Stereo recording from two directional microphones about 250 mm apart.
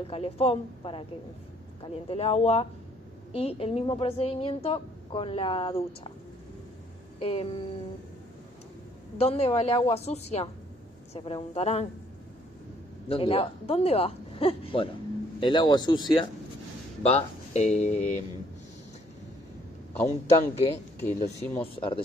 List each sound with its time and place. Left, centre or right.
0.1 s speech: left
2.0 s speech: left
7.2 s speech: left
9.2 s speech: left
13.1 s speech: left
20.5 s speech: left